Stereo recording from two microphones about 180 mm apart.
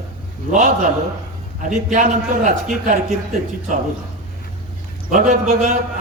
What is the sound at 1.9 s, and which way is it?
A man's voice, 45° right (ahead or behind).